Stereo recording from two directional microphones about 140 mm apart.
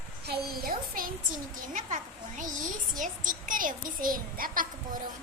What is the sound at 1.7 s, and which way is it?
A woman's voice, 60° right (ahead or behind).